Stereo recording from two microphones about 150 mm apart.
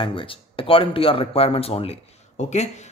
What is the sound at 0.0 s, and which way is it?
Speech, 35° left (ahead or behind).